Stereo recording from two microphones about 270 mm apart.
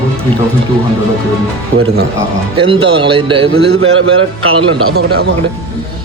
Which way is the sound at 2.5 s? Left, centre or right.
Centre.